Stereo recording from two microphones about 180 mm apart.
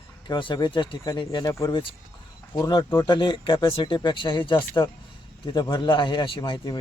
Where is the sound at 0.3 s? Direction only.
25° left (ahead or behind).